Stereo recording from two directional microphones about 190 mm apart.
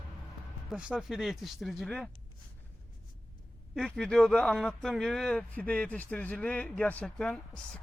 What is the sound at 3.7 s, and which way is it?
A man's voice, centre (ahead or behind).